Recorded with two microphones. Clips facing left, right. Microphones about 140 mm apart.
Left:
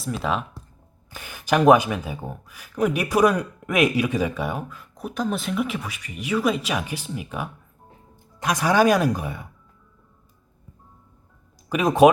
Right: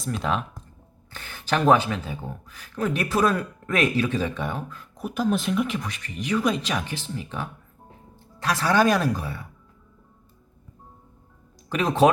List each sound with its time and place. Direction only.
0.0 s speech: centre (ahead or behind); by 9.5 s 20° left (ahead or behind)
11.7 s speech: 10° left (ahead or behind)